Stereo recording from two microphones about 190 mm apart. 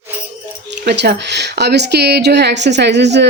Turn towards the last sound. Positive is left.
turn(degrees=-65)  # may be behind; listen again after turning